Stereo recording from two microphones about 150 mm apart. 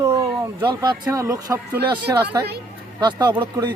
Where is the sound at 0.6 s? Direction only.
30° right (ahead or behind).